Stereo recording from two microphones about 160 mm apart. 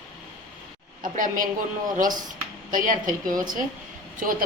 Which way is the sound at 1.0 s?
55° right (ahead or behind).